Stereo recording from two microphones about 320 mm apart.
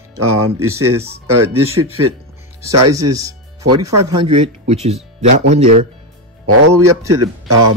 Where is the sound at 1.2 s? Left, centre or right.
Right.